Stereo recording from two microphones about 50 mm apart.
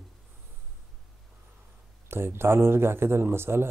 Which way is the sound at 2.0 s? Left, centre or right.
Right.